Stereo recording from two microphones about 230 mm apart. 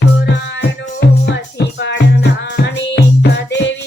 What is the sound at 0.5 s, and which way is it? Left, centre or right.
Music, left.